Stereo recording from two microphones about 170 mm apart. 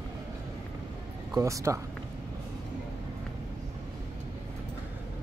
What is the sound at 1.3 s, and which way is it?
Speech, 20° right (ahead or behind).